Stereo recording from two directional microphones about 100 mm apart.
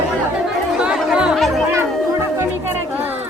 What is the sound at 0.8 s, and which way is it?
Chatter, 10° right (ahead or behind).